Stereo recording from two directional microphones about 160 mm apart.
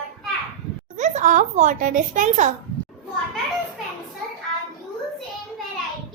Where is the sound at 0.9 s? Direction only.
50° right (ahead or behind).